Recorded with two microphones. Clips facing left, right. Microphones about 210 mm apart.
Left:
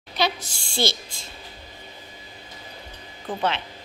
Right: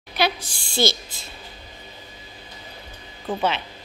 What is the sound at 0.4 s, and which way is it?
Speech, 25° left (ahead or behind).